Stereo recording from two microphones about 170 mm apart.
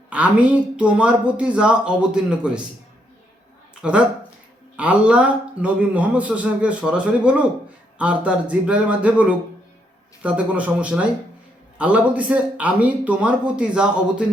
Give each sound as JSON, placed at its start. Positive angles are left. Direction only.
{"t": 0.1, "sound": "a man's voice", "side_deg": -10}
{"t": 3.8, "sound": "a man's voice", "side_deg": -5}
{"t": 10.2, "sound": "a man's voice", "side_deg": -10}